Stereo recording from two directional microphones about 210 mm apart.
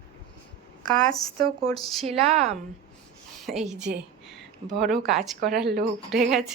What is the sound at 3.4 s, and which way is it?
Speech, centre (ahead or behind).